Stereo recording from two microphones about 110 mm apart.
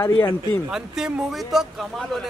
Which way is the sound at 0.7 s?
5° right (ahead or behind).